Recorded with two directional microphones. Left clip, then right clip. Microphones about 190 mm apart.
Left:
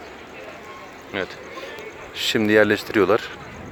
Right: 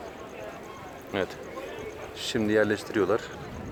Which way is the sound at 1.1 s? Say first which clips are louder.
Left 2 dB; 5° right (ahead or behind).